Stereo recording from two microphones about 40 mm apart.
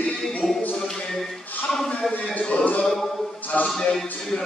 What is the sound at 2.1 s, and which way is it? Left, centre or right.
Speech, left.